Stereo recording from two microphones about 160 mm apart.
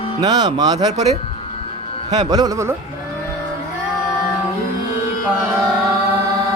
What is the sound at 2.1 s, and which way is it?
Speech, 25° right (ahead or behind).